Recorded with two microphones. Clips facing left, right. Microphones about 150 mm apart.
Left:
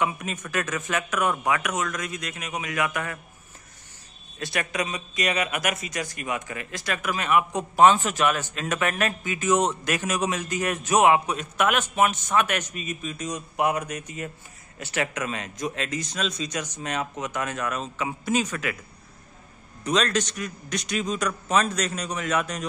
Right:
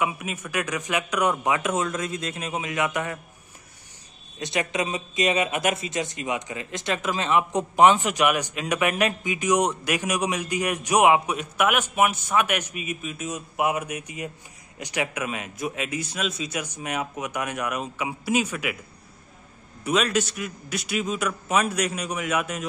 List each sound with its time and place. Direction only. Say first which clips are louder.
0.0 s speech: even; 10° right (ahead or behind)
4.4 s speech: right 2 dB; 20° right (ahead or behind)
19.8 s speech: right 1 dB; 10° right (ahead or behind)